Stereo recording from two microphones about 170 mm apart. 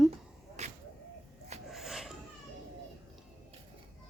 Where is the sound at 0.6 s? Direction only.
40° right (ahead or behind).